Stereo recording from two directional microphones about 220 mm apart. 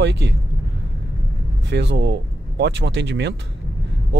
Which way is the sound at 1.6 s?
50° right (ahead or behind).